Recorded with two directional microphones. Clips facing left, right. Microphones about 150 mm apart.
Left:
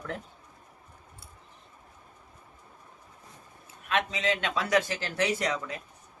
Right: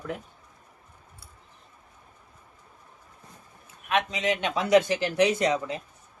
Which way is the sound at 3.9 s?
15° right (ahead or behind).